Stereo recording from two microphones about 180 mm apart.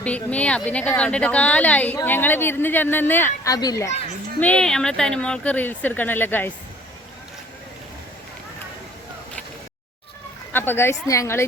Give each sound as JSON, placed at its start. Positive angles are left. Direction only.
{"t": 0.0, "sound": "speech", "side_deg": 5}
{"t": 4.4, "sound": "speech", "side_deg": 5}
{"t": 10.5, "sound": "speech", "side_deg": 10}